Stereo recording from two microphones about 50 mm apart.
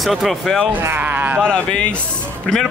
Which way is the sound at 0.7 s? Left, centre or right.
Right.